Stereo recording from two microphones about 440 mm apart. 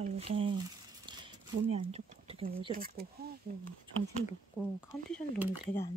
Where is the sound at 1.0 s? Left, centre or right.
Centre.